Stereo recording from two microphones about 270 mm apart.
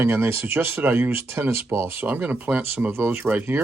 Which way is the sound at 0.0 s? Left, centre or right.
Centre.